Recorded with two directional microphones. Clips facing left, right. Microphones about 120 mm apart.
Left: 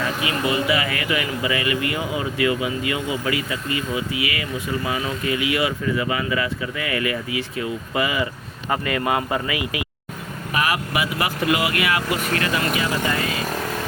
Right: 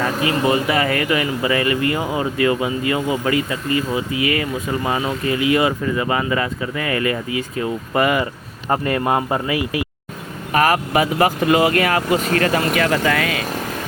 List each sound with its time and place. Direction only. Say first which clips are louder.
0.0 s speech: right 5 dB; 40° right (ahead or behind)
12.7 s speech: right 5 dB; 65° right (ahead or behind)